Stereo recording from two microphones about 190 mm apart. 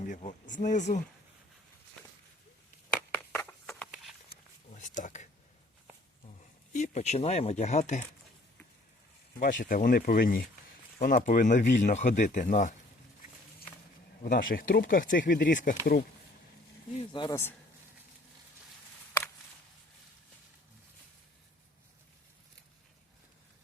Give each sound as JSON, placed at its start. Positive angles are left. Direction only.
{"t": 0.1, "sound": "speech", "side_deg": 40}
{"t": 3.7, "sound": "a sound", "side_deg": 0}
{"t": 4.3, "sound": "a sound", "side_deg": 45}
{"t": 6.7, "sound": "speech", "side_deg": 40}
{"t": 9.4, "sound": "speech", "side_deg": 45}
{"t": 14.3, "sound": "speech", "side_deg": 50}
{"t": 17.1, "sound": "speech", "side_deg": 25}